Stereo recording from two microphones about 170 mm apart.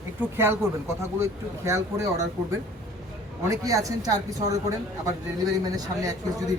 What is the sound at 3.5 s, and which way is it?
Speech, 20° right (ahead or behind).